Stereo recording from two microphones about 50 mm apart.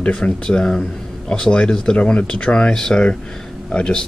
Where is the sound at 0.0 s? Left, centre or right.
Left.